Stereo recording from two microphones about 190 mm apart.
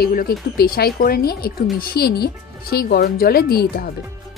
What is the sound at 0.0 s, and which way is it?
Speech, 50° left (ahead or behind).